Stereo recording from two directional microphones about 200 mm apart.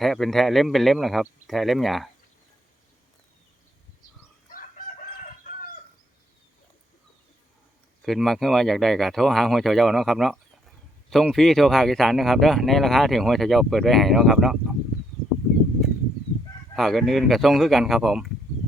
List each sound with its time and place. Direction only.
0.0 s speech: centre (ahead or behind)
4.4 s chicken: 45° left (ahead or behind)
8.0 s speech: centre (ahead or behind)
16.7 s speech: centre (ahead or behind)